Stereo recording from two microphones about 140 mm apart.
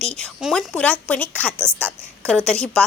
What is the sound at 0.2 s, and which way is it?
A woman's voice, 5° left (ahead or behind).